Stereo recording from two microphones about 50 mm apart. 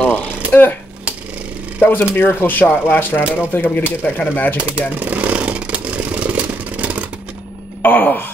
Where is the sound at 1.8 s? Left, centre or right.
Left.